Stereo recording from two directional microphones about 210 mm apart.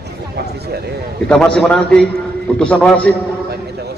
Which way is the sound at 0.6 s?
50° right (ahead or behind).